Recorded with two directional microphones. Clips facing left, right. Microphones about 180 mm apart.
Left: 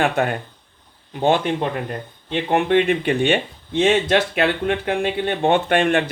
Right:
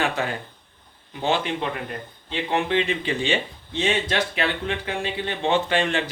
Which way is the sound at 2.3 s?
55° left (ahead or behind).